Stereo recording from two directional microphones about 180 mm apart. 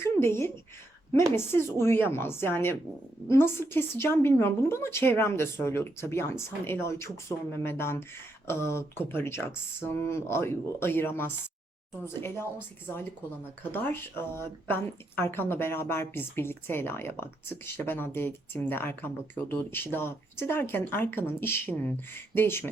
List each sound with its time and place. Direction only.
0.0 s a woman's voice: 15° left (ahead or behind)
13.6 s speech: 10° left (ahead or behind)